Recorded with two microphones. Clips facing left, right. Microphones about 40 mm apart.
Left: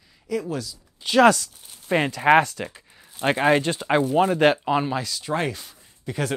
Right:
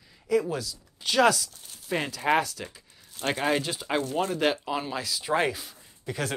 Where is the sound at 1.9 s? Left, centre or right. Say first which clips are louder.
Left 7 dB; left.